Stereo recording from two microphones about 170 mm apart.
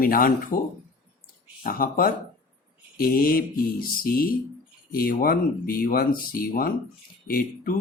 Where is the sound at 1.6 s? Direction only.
60° left (ahead or behind).